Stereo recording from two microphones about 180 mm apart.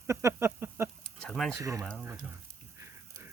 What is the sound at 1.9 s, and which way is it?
Speech, 5° right (ahead or behind).